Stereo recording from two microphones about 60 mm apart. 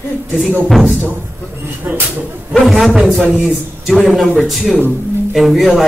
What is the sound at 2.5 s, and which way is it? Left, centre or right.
Speech, centre.